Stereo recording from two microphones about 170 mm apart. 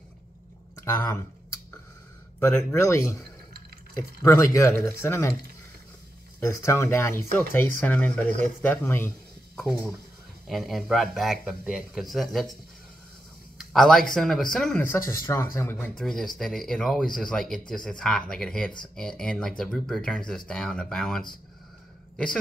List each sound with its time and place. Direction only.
0.8 s speech: 15° left (ahead or behind)
2.4 s speech: 15° left (ahead or behind)
6.4 s speech: 15° left (ahead or behind)
9.6 s speech: centre (ahead or behind)
13.6 s speech: centre (ahead or behind)
16.0 s speech: centre (ahead or behind)